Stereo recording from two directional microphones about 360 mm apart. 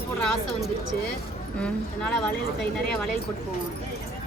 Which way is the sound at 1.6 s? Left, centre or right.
Centre.